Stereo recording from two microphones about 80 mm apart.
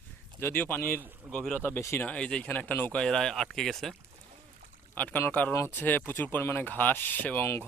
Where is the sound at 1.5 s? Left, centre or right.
Left.